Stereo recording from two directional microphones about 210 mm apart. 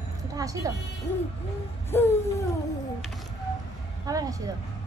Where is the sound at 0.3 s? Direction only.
15° right (ahead or behind).